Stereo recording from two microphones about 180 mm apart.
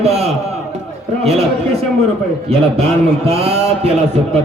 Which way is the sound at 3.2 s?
35° right (ahead or behind).